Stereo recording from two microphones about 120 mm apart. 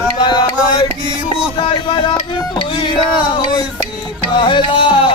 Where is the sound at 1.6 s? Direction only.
40° left (ahead or behind).